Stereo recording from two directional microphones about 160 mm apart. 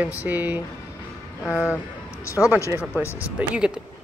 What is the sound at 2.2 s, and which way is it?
Speech, 20° left (ahead or behind).